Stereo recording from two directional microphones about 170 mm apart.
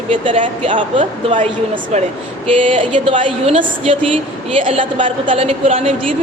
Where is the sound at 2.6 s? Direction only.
30° right (ahead or behind).